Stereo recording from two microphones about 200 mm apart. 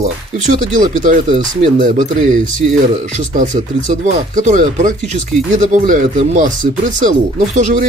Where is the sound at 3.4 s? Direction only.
40° right (ahead or behind).